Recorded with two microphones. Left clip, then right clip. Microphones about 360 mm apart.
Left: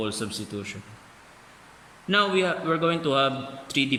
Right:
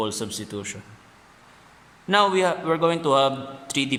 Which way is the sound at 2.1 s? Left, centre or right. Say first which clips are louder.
Right 3 dB; centre.